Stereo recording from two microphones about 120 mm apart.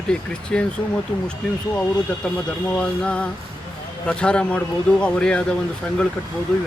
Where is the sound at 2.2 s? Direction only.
10° left (ahead or behind).